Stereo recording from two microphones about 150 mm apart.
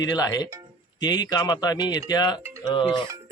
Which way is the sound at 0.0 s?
25° left (ahead or behind).